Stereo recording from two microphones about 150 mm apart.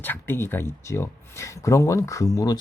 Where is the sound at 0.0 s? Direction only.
15° left (ahead or behind).